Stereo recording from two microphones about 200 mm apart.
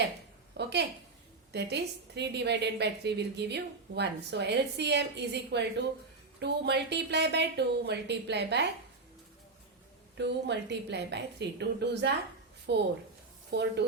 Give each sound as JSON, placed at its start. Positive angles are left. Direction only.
{"t": 0.5, "sound": "a sound", "side_deg": -60}
{"t": 1.5, "sound": "a woman's voice", "side_deg": -55}
{"t": 10.2, "sound": "a woman's voice", "side_deg": -60}